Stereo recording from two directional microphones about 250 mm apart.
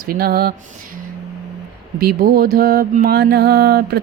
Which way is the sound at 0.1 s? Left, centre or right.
Right.